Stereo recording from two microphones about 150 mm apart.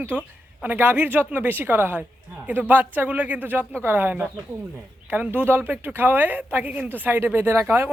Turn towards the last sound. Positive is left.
turn(degrees=-15)  # may be behind; listen again after turning